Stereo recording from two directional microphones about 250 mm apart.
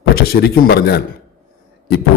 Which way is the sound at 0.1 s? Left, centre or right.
Left.